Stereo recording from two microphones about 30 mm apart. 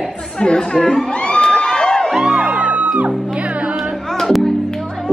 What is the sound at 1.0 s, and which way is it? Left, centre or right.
Crowd, left.